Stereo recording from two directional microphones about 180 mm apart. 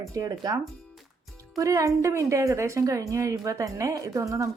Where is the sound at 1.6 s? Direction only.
15° right (ahead or behind).